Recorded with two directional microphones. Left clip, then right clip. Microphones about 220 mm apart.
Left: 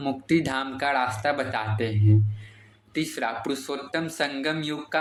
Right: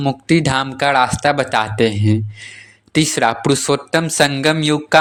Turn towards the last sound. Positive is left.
turn(degrees=-45)  # may be behind; listen again after turning